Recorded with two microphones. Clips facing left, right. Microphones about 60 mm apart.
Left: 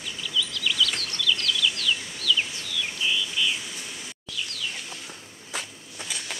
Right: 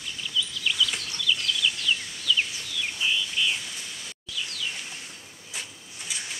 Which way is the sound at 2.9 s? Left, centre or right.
Centre.